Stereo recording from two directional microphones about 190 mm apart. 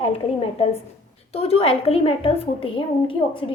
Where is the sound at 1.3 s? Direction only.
30° left (ahead or behind).